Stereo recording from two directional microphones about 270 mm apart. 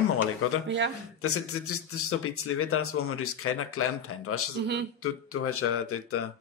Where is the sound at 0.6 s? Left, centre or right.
Right.